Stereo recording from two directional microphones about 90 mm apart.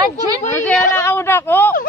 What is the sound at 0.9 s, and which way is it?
Speech, 30° left (ahead or behind).